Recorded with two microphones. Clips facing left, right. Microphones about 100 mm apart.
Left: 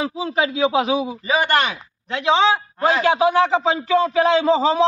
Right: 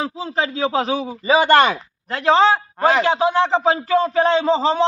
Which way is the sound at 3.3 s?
5° left (ahead or behind).